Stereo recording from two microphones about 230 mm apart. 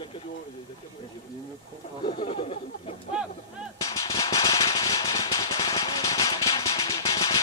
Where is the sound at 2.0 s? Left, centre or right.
Left.